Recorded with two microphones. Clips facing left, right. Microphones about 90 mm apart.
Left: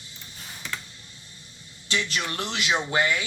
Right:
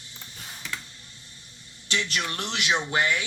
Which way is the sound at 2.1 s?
15° left (ahead or behind).